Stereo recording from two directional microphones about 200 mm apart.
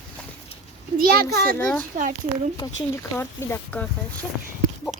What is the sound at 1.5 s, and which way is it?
Speech, 5° left (ahead or behind).